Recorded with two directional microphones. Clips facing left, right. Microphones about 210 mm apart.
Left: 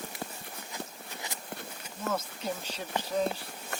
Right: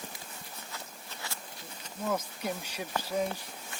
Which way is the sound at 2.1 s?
10° right (ahead or behind).